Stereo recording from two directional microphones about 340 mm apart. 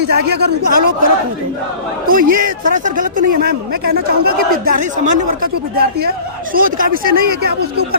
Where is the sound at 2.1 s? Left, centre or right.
Right.